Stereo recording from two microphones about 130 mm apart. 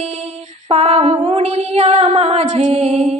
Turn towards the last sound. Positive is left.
turn(degrees=-55)  # may be behind; listen again after turning